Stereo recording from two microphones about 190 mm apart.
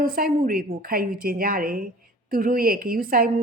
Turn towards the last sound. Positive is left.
turn(degrees=-50)  # may be behind; listen again after turning